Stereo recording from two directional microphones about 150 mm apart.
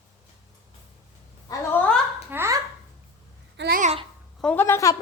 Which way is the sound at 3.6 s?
75° right (ahead or behind).